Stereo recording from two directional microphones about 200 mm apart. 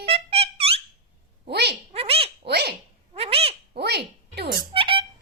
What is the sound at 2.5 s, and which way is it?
Speech, 55° right (ahead or behind).